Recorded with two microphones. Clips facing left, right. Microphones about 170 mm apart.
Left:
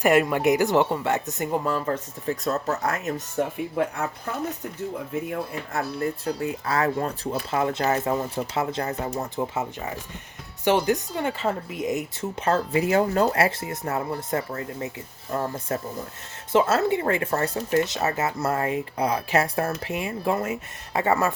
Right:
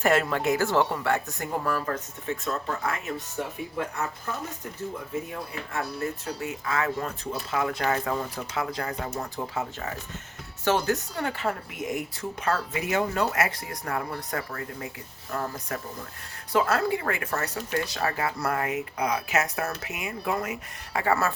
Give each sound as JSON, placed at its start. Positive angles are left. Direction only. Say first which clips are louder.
{"t": 0.0, "sound": "speech", "louder": "left 4 dB", "side_deg": 15}
{"t": 2.2, "sound": "speech", "louder": "left 5 dB", "side_deg": 35}
{"t": 5.7, "sound": "speech", "louder": "left 3 dB", "side_deg": 35}